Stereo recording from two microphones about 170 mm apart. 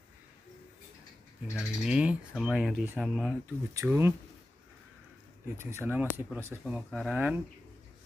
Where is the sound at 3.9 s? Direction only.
15° right (ahead or behind).